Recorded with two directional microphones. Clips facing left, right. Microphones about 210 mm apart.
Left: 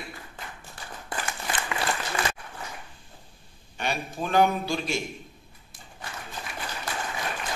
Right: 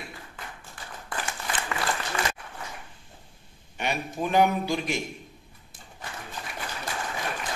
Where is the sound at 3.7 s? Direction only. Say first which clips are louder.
Right 1 dB; 20° right (ahead or behind).